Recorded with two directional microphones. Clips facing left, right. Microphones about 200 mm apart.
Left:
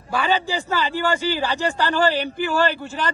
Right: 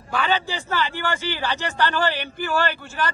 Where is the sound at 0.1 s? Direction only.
15° left (ahead or behind).